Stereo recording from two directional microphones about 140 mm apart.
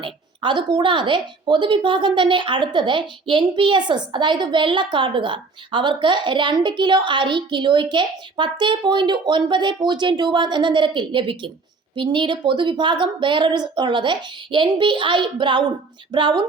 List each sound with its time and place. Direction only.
0.0 s a woman's voice: 35° right (ahead or behind)